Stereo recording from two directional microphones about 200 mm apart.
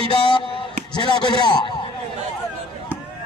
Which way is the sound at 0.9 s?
20° left (ahead or behind).